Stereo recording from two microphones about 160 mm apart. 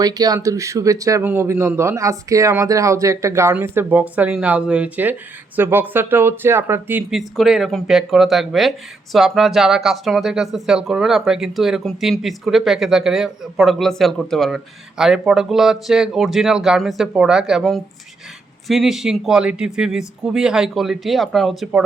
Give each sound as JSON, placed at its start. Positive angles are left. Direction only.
{"t": 0.0, "sound": "speech", "side_deg": -25}